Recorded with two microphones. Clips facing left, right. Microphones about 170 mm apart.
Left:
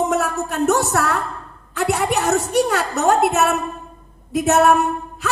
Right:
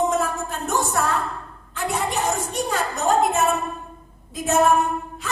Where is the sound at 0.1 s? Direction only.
70° left (ahead or behind).